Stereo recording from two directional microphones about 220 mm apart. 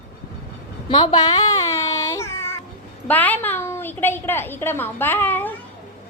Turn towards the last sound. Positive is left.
turn(degrees=10)  # may be behind; listen again after turning